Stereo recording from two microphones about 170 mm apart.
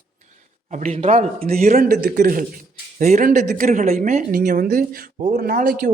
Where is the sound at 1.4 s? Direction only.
60° right (ahead or behind).